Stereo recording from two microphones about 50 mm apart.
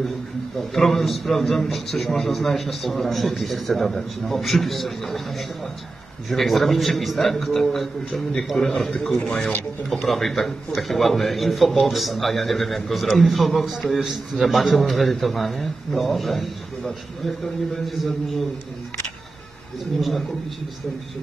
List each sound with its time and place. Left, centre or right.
0.6 s a man's voice: centre
6.3 s a man's voice: centre
9.0 s a man's voice: centre
18.0 s a man's voice: centre
20.0 s a man's voice: centre